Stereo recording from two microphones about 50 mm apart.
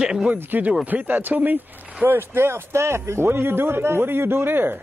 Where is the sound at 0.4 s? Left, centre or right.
Right.